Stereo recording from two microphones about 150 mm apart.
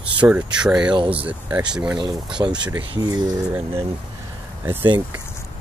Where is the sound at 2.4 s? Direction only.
20° right (ahead or behind).